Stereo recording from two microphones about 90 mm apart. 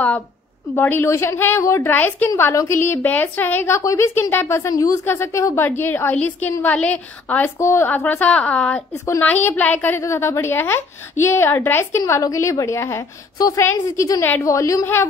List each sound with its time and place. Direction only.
0.7 s a woman's voice: 25° left (ahead or behind)
3.7 s a woman's voice: 35° left (ahead or behind)
5.0 s a woman's voice: 30° left (ahead or behind)
5.7 s a woman's voice: 20° left (ahead or behind)
7.5 s a woman's voice: 30° left (ahead or behind)
7.9 s a woman's voice: 15° left (ahead or behind); by 14.9 s 35° left (ahead or behind)